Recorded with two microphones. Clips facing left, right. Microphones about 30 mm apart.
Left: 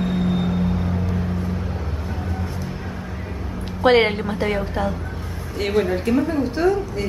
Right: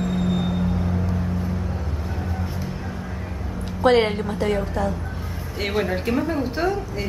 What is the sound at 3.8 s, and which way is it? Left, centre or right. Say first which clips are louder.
A woman's voice: left 2 dB; centre.